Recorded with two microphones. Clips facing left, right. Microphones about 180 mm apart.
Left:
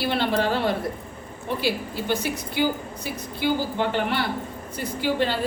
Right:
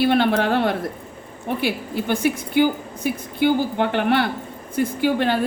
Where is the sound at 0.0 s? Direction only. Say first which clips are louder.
Right 5 dB; 55° right (ahead or behind).